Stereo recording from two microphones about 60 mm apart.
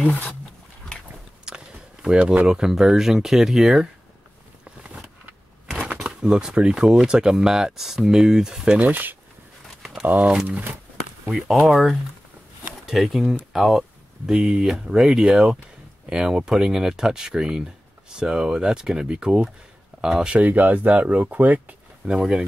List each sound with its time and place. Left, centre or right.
1.4 s a sound: centre
2.4 s speech: centre
5.9 s speech: centre
8.7 s speech: right
11.2 s speech: centre
20.3 s speech: right
22.0 s speech: centre